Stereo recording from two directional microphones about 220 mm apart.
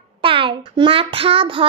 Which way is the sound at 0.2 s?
25° right (ahead or behind).